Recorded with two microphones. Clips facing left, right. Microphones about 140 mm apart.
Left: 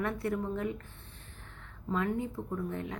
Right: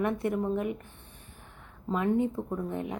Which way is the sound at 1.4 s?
15° right (ahead or behind).